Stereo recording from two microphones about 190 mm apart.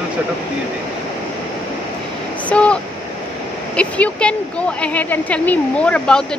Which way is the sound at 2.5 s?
5° left (ahead or behind).